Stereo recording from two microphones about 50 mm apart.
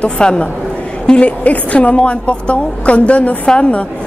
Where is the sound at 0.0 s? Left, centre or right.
Centre.